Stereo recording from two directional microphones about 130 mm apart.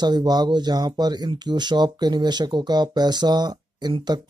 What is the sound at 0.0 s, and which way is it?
Speech, 35° right (ahead or behind).